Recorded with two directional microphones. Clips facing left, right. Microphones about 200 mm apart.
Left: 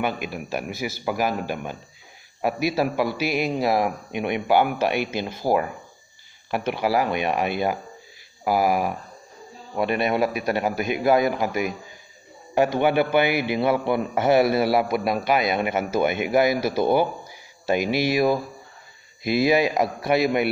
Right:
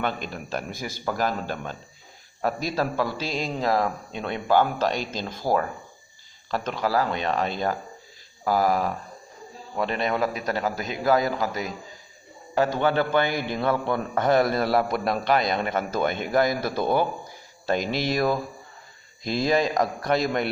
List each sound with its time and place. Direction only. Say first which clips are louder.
0.0 s a man's voice: left 2 dB; 10° left (ahead or behind)